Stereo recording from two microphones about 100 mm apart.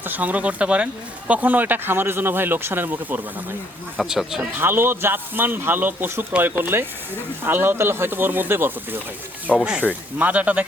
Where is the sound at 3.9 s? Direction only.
5° right (ahead or behind).